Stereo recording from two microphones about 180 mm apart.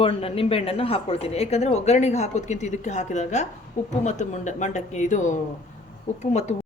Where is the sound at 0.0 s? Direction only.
30° left (ahead or behind).